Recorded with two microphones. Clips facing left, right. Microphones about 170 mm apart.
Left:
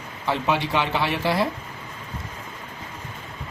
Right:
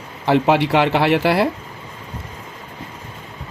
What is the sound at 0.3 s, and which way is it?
Speech, 70° right (ahead or behind).